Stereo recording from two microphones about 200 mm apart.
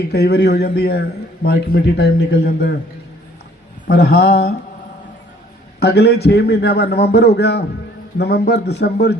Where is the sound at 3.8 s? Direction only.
50° left (ahead or behind).